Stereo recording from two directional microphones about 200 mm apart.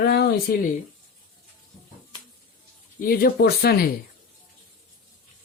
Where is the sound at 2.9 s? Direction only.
45° left (ahead or behind).